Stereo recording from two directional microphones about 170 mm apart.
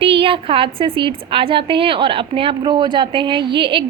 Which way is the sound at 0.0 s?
30° right (ahead or behind).